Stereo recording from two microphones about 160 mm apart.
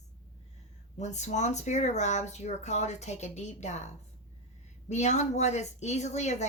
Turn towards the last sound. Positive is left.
turn(degrees=45)  # may be behind; listen again after turning